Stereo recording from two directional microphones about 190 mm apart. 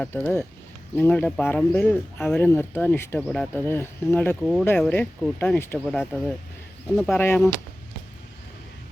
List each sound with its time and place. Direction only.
0.0 s speech: 10° left (ahead or behind)
5.8 s speech: centre (ahead or behind)
7.2 s speech: 10° left (ahead or behind)